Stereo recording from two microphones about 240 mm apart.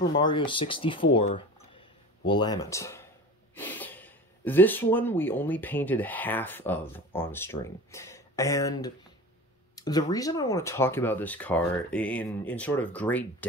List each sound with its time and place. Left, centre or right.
0.0 s speech: centre